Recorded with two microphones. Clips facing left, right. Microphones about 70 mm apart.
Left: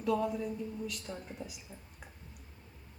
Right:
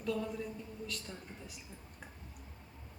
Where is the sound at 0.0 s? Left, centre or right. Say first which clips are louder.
Left 5 dB; centre.